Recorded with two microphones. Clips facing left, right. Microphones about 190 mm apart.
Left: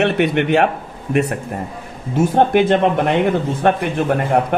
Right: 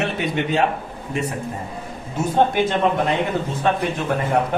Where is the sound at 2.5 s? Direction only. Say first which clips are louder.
Left 5 dB; 60° left (ahead or behind).